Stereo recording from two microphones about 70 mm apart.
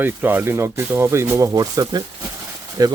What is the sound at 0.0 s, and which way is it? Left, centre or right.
Speech, right.